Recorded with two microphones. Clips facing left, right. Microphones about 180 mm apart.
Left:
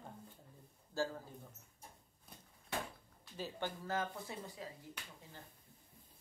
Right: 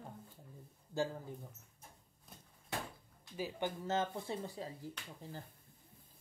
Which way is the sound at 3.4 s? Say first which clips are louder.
Right 3 dB; 15° right (ahead or behind).